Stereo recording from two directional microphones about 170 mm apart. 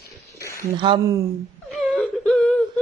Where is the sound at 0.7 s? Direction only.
30° right (ahead or behind).